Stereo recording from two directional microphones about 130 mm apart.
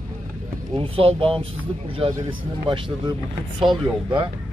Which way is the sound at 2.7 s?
35° right (ahead or behind).